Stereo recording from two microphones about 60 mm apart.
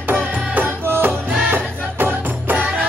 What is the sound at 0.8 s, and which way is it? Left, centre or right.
Music, right.